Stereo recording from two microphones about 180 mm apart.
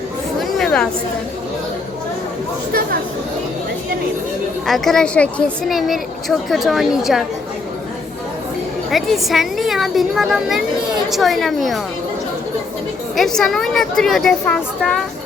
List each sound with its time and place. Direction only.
0.3 s chatter: centre (ahead or behind)
4.6 s speech: centre (ahead or behind)
8.9 s speech: centre (ahead or behind)
13.1 s speech: centre (ahead or behind)